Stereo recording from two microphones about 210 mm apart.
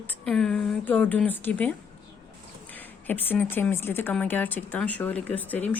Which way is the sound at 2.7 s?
10° left (ahead or behind).